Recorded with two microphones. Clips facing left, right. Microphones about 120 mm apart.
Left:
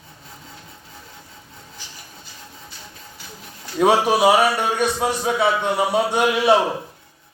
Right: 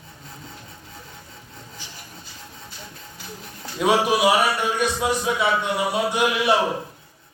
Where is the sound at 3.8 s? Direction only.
45° left (ahead or behind).